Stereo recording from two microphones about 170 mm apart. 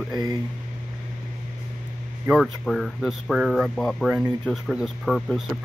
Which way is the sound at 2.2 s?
Centre (ahead or behind).